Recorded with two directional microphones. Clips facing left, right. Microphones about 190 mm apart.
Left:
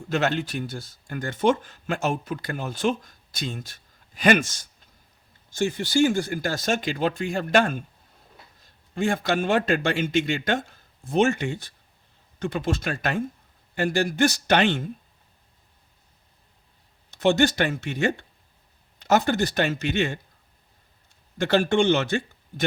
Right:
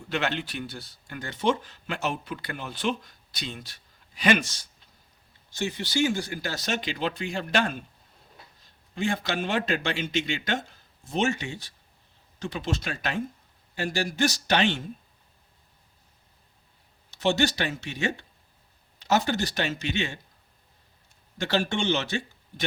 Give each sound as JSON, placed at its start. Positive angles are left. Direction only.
{"t": 0.1, "sound": "speech", "side_deg": 45}
{"t": 9.0, "sound": "a man's voice", "side_deg": 50}
{"t": 17.1, "sound": "speech", "side_deg": 55}
{"t": 21.3, "sound": "speech", "side_deg": 55}